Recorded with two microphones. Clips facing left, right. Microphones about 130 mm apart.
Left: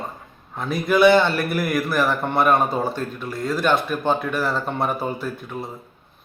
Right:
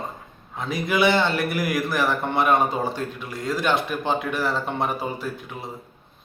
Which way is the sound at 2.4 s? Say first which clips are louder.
Left 1 dB; 20° right (ahead or behind).